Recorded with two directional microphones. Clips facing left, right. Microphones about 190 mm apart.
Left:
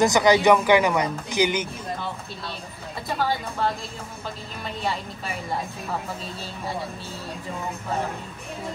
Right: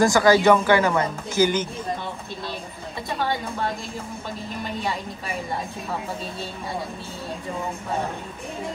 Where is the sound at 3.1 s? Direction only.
Centre (ahead or behind).